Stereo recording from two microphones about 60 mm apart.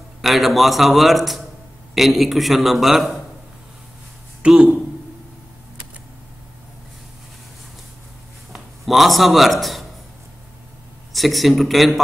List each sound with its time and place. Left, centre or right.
0.2 s a man's voice: centre
4.4 s speech: right
8.5 s a man's voice: centre
11.1 s a man's voice: centre